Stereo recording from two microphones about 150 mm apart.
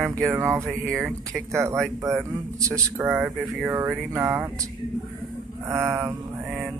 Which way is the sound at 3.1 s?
Centre (ahead or behind).